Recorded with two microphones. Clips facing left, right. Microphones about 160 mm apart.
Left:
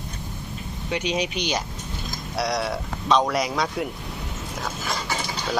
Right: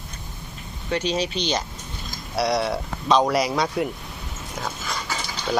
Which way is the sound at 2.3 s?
Centre (ahead or behind).